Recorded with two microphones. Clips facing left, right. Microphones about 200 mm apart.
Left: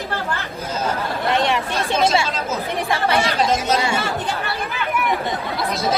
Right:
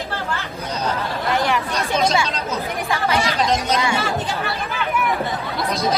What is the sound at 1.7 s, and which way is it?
Speech, centre (ahead or behind).